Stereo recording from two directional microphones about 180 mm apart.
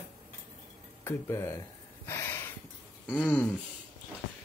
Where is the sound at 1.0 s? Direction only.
15° left (ahead or behind).